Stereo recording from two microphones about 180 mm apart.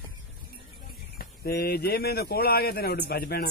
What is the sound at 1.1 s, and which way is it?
Speech, 60° left (ahead or behind).